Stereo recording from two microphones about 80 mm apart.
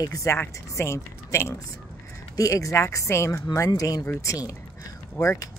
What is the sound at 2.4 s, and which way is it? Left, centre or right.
Speech, left.